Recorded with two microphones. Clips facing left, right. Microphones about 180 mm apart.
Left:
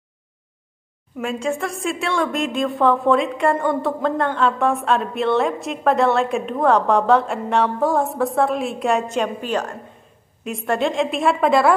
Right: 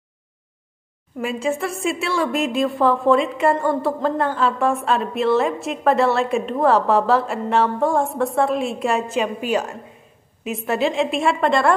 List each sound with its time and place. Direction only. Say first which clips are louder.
1.2 s a woman's voice: right 1 dB; 5° right (ahead or behind)